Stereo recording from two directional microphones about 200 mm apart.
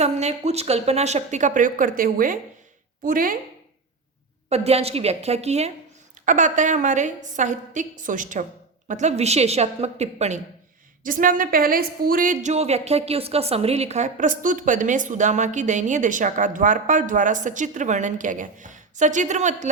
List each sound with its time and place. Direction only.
0.0 s a woman's voice: 35° right (ahead or behind)
4.4 s a woman's voice: 30° right (ahead or behind)